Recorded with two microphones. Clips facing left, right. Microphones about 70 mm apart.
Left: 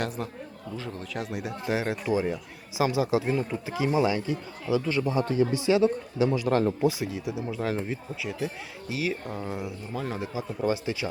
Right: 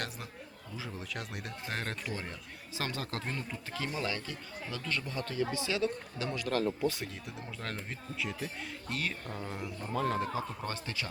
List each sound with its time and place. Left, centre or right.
0.8 s a man's voice: centre
6.8 s speech: centre